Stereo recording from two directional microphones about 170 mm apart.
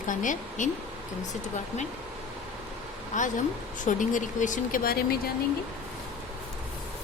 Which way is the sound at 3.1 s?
50° left (ahead or behind).